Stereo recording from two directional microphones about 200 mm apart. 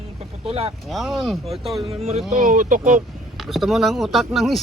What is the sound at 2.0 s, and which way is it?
Speech, 30° right (ahead or behind).